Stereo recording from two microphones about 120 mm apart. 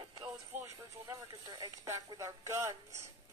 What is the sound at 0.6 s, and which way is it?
Speech, 25° right (ahead or behind).